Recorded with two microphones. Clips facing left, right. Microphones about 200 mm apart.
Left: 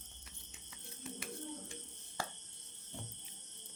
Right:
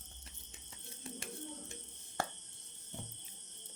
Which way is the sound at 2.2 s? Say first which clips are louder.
Right 4 dB; 55° right (ahead or behind).